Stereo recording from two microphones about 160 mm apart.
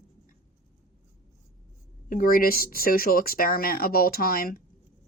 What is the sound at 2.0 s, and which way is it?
Speech, 60° left (ahead or behind).